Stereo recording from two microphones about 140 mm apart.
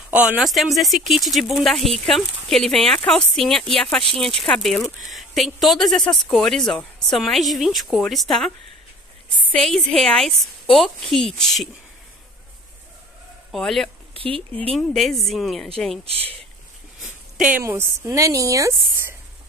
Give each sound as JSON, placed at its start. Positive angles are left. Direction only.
{"t": 0.1, "sound": "speech", "side_deg": -10}
{"t": 9.5, "sound": "speech", "side_deg": 5}
{"t": 13.5, "sound": "speech", "side_deg": 0}
{"t": 14.1, "sound": "speech", "side_deg": -40}
{"t": 14.7, "sound": "speech", "side_deg": 5}
{"t": 16.1, "sound": "speech", "side_deg": -45}
{"t": 17.4, "sound": "speech", "side_deg": -15}